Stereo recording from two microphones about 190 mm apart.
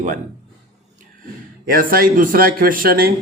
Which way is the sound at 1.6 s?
50° right (ahead or behind).